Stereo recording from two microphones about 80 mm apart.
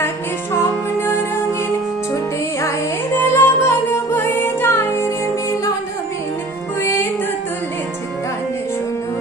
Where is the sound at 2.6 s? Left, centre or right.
Left.